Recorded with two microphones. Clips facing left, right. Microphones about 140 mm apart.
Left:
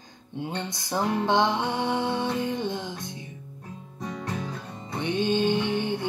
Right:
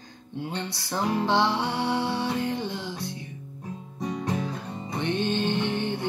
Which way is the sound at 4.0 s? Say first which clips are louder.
Right 4 dB; 15° right (ahead or behind).